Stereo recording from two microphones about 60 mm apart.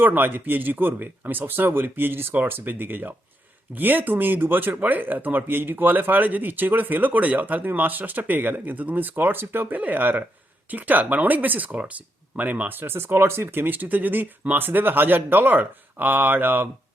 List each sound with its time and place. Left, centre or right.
0.0 s speech: right